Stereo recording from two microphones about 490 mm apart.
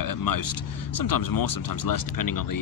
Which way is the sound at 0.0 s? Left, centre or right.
Left.